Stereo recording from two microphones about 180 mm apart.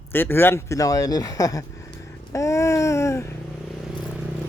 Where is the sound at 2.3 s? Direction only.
15° left (ahead or behind).